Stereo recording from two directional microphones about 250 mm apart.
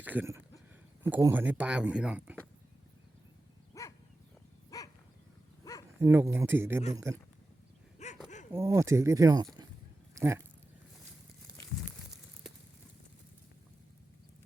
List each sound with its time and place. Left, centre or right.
0.0 s speech: centre
3.7 s dog: centre
6.0 s speech: centre
7.9 s dog: left
8.5 s speech: centre